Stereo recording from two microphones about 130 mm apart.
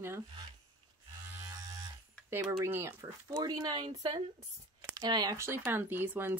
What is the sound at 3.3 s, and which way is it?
Speech, 30° right (ahead or behind).